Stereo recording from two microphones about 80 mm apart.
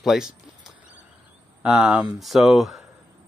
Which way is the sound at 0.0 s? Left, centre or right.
Centre.